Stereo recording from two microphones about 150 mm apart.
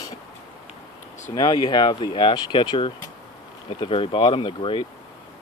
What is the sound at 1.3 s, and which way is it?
Speech, 25° left (ahead or behind).